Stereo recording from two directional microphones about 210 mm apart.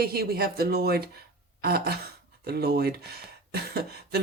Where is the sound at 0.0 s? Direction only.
50° right (ahead or behind).